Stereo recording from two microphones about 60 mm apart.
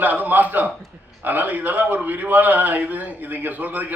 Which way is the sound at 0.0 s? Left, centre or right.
Right.